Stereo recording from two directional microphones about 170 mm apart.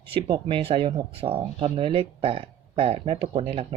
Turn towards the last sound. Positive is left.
turn(degrees=-35)  # may be behind; listen again after turning